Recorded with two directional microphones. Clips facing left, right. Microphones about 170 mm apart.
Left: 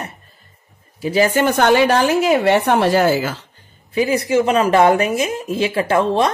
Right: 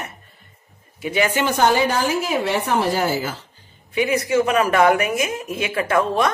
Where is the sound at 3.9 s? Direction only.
35° left (ahead or behind).